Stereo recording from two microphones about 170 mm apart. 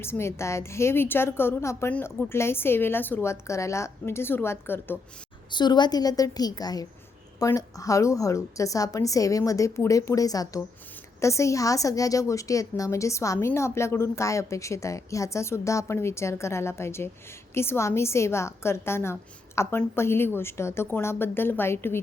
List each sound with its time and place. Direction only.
0.0 s a woman's voice: 15° left (ahead or behind)
5.5 s a woman's voice: 25° left (ahead or behind)